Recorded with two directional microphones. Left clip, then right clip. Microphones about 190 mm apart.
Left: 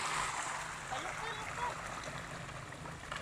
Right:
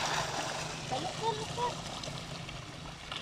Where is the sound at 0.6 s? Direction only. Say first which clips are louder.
Right 4 dB; 30° right (ahead or behind); by 2.6 s 5° right (ahead or behind).